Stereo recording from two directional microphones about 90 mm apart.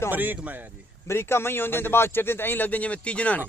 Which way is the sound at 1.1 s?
30° left (ahead or behind).